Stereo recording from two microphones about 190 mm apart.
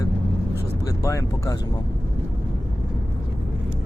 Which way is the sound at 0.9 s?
15° left (ahead or behind).